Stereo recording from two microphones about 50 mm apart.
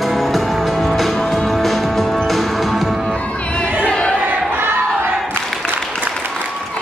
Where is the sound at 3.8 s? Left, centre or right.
Centre.